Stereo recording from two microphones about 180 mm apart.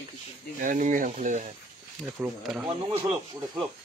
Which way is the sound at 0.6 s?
45° right (ahead or behind).